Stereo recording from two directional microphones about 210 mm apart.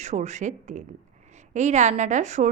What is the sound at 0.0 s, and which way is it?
A woman's voice, 35° right (ahead or behind).